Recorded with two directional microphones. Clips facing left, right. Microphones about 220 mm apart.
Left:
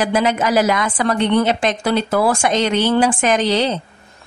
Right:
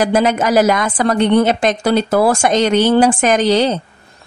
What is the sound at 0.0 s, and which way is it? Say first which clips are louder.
Speech: right 3 dB; 45° right (ahead or behind).